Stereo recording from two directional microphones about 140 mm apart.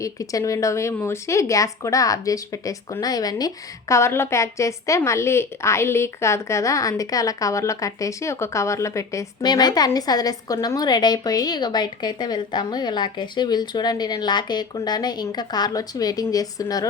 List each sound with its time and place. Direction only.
0.0 s a woman's voice: 25° left (ahead or behind)